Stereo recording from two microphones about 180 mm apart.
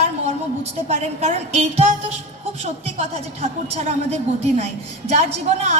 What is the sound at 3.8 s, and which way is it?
Speech, 35° right (ahead or behind).